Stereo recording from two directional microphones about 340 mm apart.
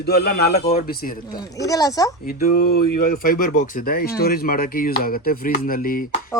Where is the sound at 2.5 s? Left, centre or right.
Left.